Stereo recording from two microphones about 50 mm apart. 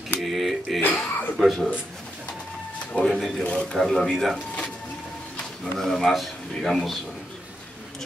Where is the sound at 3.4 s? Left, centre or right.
Left.